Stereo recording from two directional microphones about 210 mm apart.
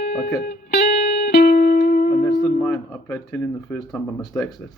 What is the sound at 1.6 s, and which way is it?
Music, 45° left (ahead or behind).